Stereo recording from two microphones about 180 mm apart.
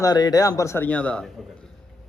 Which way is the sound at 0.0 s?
20° left (ahead or behind).